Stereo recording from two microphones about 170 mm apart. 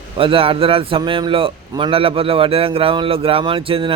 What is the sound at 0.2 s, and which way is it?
A man's voice, 30° right (ahead or behind).